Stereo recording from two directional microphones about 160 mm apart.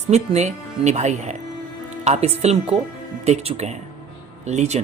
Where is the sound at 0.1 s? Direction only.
45° right (ahead or behind).